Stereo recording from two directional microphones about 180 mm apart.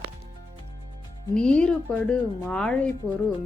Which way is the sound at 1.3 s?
5° left (ahead or behind).